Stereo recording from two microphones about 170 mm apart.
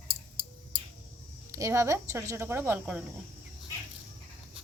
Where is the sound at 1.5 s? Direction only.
15° right (ahead or behind).